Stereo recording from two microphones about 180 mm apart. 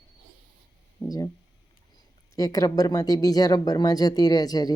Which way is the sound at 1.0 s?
5° left (ahead or behind).